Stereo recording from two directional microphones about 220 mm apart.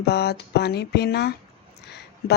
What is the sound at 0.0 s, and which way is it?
Speech, 45° left (ahead or behind).